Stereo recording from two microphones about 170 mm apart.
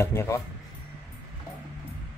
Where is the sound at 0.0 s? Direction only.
15° left (ahead or behind).